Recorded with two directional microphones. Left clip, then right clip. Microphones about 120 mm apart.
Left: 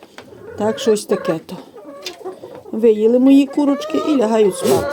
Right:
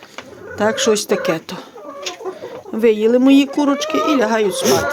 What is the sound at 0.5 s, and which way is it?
Speech, 30° left (ahead or behind).